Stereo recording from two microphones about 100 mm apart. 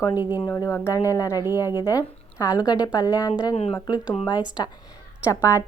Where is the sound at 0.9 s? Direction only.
35° left (ahead or behind).